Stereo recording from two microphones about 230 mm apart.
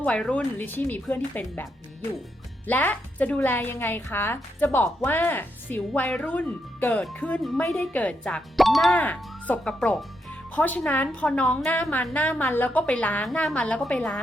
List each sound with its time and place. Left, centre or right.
0.0 s a woman's voice: centre
2.6 s a woman's voice: centre